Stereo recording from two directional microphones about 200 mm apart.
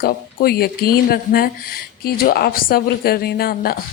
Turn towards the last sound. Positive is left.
turn(degrees=50)  # may be behind; listen again after turning